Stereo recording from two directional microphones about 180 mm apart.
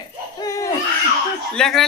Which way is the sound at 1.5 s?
5° left (ahead or behind).